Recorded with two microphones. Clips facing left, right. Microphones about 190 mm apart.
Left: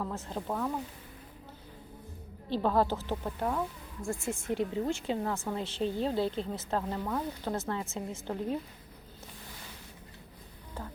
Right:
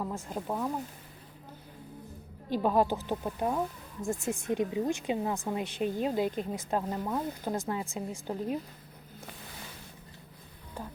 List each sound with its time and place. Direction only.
0.0 s speech: 10° right (ahead or behind)
2.5 s speech: 15° right (ahead or behind)
10.8 s speech: 15° right (ahead or behind)